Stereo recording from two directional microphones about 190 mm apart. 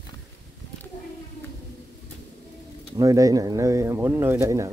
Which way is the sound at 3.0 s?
20° right (ahead or behind).